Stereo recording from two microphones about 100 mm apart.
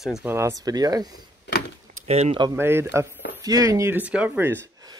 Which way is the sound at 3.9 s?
15° right (ahead or behind).